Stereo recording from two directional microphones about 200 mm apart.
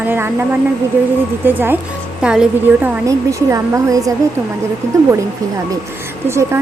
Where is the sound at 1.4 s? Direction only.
10° right (ahead or behind).